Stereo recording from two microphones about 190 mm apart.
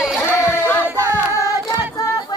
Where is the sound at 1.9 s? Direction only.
20° left (ahead or behind).